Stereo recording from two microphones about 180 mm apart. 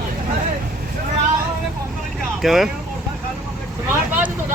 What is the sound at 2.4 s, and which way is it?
Speech, centre (ahead or behind).